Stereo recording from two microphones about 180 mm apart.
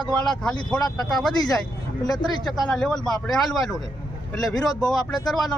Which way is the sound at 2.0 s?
20° left (ahead or behind).